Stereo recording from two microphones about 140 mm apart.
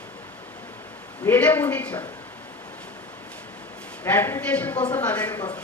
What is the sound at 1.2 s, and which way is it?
Speech, 10° left (ahead or behind).